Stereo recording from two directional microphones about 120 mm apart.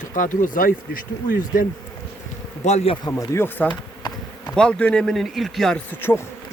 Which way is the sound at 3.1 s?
20° left (ahead or behind).